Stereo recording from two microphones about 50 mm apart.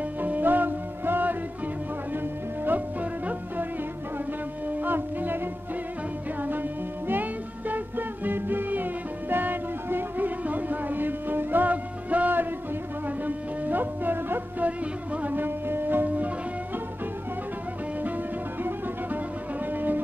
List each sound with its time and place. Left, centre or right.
0.2 s music: right
4.6 s music: right
7.1 s music: right
18.0 s music: right